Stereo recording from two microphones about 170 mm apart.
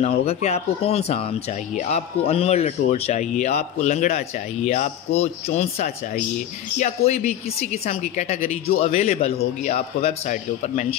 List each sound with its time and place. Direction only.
0.2 s a woman's voice: 40° left (ahead or behind)